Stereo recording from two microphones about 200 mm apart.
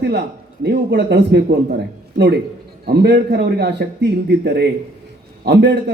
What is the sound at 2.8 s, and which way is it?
A man's voice, 55° right (ahead or behind).